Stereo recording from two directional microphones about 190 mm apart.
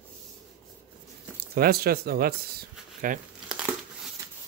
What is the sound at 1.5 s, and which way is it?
Speech, 55° right (ahead or behind).